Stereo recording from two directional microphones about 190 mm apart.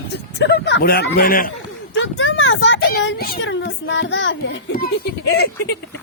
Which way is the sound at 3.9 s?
75° left (ahead or behind).